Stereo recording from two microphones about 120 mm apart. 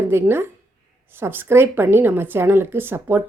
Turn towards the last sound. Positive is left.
turn(degrees=-15)  # may be behind; listen again after turning